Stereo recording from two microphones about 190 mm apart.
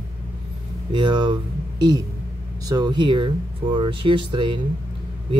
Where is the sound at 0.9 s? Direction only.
25° right (ahead or behind).